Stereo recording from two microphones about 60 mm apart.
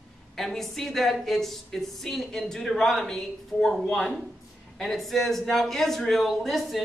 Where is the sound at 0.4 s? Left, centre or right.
Centre.